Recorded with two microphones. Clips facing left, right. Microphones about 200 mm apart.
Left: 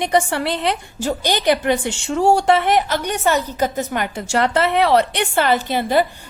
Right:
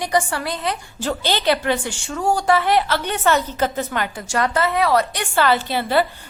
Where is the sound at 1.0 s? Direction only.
15° left (ahead or behind).